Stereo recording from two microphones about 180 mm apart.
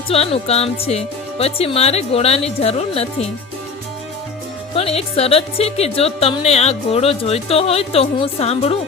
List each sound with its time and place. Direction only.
0.1 s speech: 35° left (ahead or behind)
4.7 s speech: 35° left (ahead or behind)